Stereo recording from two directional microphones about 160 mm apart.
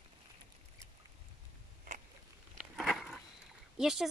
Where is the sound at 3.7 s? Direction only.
5° right (ahead or behind).